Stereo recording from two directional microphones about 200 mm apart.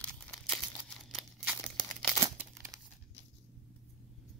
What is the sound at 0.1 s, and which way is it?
Crumpling, 5° left (ahead or behind).